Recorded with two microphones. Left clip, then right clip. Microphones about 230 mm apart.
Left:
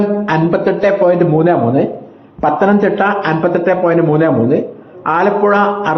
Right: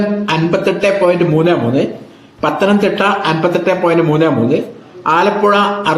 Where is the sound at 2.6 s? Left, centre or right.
Centre.